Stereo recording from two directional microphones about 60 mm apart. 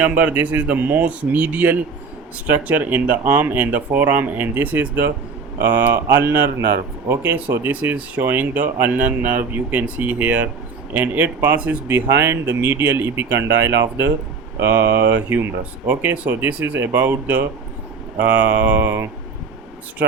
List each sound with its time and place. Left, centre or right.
0.0 s speech: right
7.7 s speech: right
11.9 s speech: right